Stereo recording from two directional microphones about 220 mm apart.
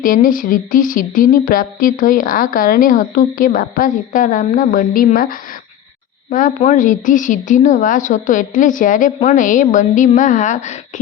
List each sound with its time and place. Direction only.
0.0 s speech: 40° left (ahead or behind)